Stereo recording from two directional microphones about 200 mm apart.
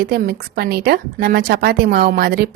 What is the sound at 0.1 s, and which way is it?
A woman's voice, 50° right (ahead or behind).